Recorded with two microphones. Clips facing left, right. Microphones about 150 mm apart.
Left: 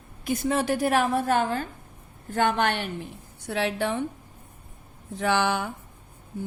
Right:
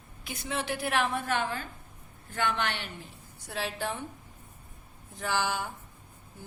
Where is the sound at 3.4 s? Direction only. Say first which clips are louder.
Left 7 dB; 65° left (ahead or behind).